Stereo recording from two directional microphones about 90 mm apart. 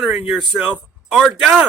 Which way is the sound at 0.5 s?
10° right (ahead or behind).